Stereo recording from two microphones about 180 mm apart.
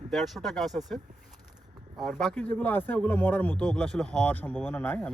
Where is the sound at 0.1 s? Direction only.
Centre (ahead or behind).